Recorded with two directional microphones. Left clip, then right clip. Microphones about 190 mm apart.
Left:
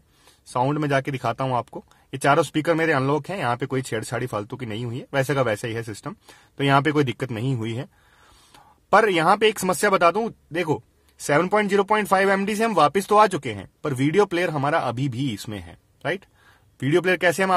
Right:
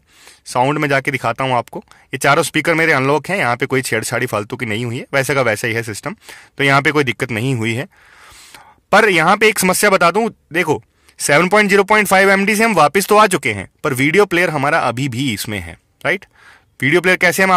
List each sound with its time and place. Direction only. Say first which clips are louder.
0.5 s speech: right 8 dB; 15° right (ahead or behind)
8.9 s speech: right 6 dB; 20° right (ahead or behind)